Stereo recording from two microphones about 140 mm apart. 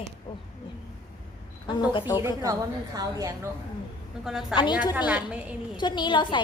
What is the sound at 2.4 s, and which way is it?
Speech, 25° right (ahead or behind).